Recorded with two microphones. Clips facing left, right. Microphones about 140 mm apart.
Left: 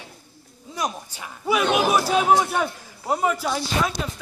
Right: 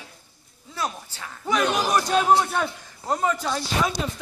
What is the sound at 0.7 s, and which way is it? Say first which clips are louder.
A man's voice: left 2 dB; 15° left (ahead or behind).